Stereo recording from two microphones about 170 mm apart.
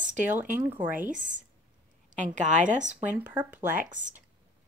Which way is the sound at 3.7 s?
50° right (ahead or behind).